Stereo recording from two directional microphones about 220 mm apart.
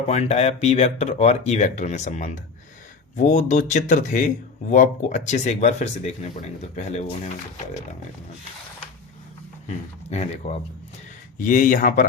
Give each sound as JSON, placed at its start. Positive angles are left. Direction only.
{"t": 0.1, "sound": "speech", "side_deg": 30}
{"t": 10.1, "sound": "speech", "side_deg": 30}